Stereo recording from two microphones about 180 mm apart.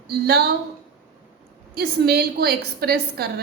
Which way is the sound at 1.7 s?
60° right (ahead or behind).